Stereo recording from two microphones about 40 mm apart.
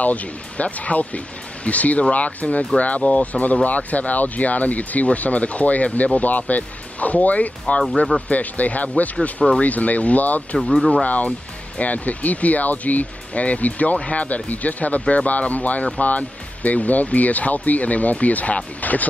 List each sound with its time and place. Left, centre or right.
0.0 s speech: left
10.6 s speech: centre
11.1 s speech: left